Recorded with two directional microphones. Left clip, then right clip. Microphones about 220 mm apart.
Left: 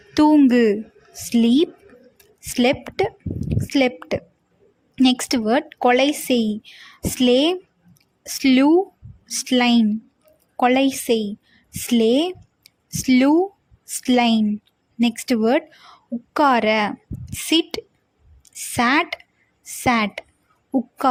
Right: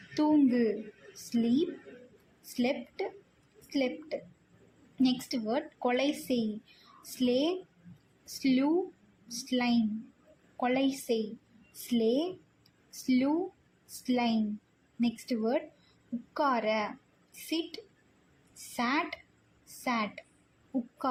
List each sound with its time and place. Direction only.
0.2 s a woman's voice: 50° left (ahead or behind)
18.8 s a woman's voice: 50° left (ahead or behind)